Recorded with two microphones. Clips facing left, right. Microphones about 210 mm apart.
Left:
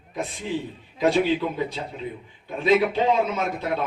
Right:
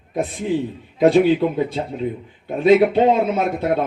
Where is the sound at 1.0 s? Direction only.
55° right (ahead or behind).